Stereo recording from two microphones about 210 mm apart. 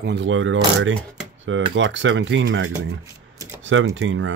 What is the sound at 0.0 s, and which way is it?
Speech, 55° right (ahead or behind).